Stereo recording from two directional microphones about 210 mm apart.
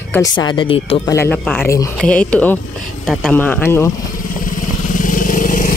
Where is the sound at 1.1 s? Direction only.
5° left (ahead or behind).